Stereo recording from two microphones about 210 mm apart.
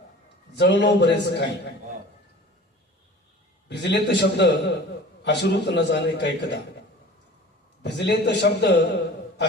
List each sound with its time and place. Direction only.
0.6 s a man's voice: 55° left (ahead or behind)
3.7 s a man's voice: 55° left (ahead or behind)
7.8 s a man's voice: 55° left (ahead or behind)